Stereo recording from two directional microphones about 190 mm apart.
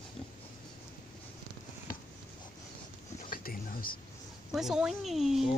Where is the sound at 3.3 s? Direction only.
50° left (ahead or behind).